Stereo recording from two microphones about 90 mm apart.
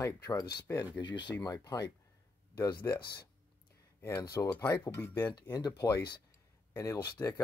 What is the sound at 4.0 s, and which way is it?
Speech, 25° left (ahead or behind).